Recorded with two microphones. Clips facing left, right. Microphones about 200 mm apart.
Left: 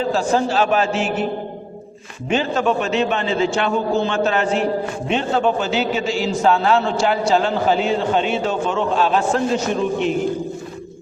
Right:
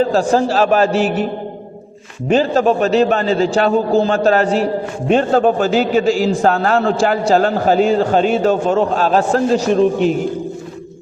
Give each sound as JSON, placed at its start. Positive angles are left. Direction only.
{"t": 0.0, "sound": "a man's voice", "side_deg": -40}
{"t": 2.2, "sound": "a man's voice", "side_deg": -40}